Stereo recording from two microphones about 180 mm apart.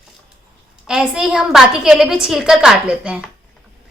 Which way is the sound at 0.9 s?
5° right (ahead or behind).